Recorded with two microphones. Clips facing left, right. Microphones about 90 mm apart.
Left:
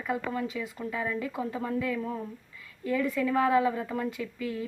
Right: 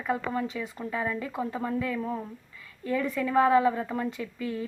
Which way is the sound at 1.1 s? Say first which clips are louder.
Even; 5° left (ahead or behind).